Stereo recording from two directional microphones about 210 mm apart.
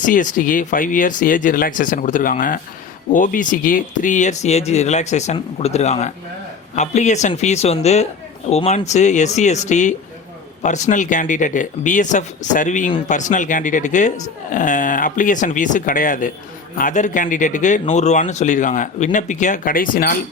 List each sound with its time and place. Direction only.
0.0 s a man's voice: 40° left (ahead or behind)